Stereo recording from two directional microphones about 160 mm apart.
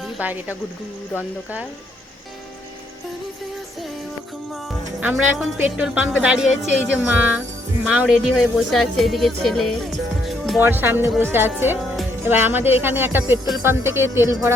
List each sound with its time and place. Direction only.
0.0 s speech: 10° right (ahead or behind)
4.9 s speech: 10° right (ahead or behind)
10.2 s music: centre (ahead or behind)
10.6 s speech: 15° right (ahead or behind)